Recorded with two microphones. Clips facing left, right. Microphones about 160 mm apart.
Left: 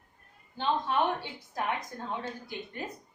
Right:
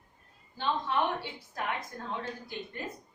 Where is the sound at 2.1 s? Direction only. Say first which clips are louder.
Left 1 dB; 20° left (ahead or behind).